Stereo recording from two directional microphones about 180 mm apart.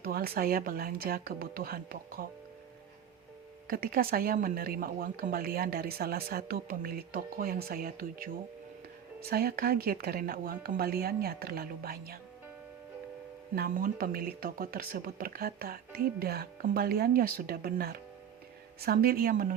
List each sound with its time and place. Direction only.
0.0 s speech: 55° right (ahead or behind)
3.7 s speech: 55° right (ahead or behind)
13.6 s speech: 50° right (ahead or behind)